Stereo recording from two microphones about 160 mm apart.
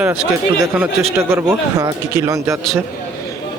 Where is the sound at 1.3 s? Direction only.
20° right (ahead or behind).